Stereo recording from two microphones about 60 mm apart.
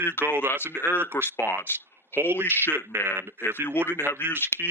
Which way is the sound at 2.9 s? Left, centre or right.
Right.